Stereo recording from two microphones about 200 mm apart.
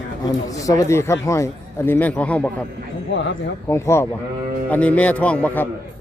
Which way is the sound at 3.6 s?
15° left (ahead or behind).